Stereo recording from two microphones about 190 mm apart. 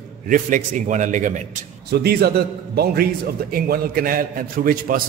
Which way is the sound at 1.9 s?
55° right (ahead or behind).